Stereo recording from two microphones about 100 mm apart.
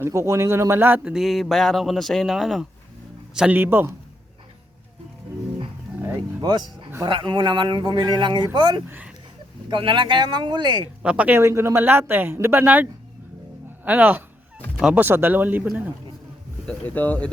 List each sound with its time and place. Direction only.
0.0 s a woman's voice: 30° right (ahead or behind)
1.1 s a man's voice: centre (ahead or behind)
3.5 s a woman's voice: 20° right (ahead or behind)
6.1 s speech: 40° right (ahead or behind)
8.9 s speech: 15° right (ahead or behind)
9.6 s speech: 55° right (ahead or behind)
11.0 s speech: 10° right (ahead or behind)
11.3 s a woman's voice: 25° right (ahead or behind)
14.8 s speech: 5° right (ahead or behind)
15.0 s a woman's voice: 20° right (ahead or behind)
16.6 s speech: 15° left (ahead or behind)